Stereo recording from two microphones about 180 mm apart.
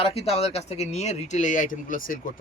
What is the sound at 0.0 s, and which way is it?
Speech, 35° left (ahead or behind).